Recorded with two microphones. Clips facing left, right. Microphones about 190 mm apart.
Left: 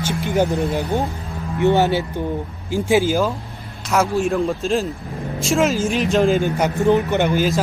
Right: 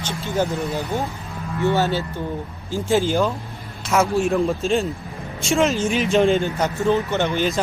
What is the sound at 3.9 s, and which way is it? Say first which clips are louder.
Speech: even; centre (ahead or behind).